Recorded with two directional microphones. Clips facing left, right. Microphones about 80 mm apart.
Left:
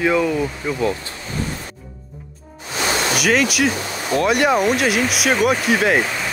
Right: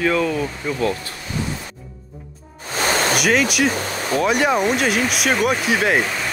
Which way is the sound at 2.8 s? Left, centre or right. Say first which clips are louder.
Right 1 dB; right.